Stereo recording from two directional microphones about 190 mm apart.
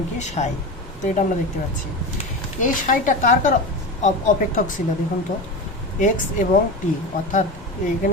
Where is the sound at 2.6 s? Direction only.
45° left (ahead or behind).